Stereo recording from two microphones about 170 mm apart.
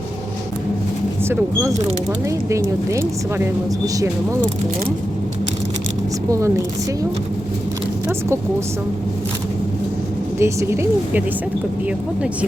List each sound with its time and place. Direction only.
2.5 s speech: 15° right (ahead or behind)
10.4 s speech: 15° right (ahead or behind)